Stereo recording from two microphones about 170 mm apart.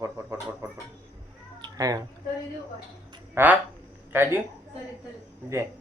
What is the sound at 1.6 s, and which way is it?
Cat, 25° right (ahead or behind).